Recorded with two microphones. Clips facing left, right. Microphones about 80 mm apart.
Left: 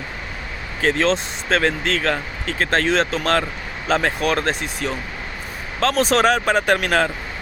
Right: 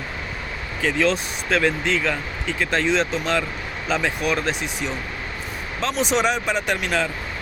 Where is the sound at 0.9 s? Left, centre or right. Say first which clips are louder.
Left 1 dB; left.